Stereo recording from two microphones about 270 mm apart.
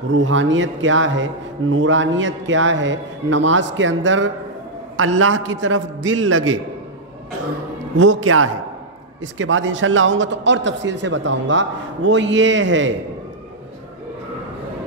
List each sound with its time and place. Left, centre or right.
0.1 s a man's voice: right
8.0 s a man's voice: right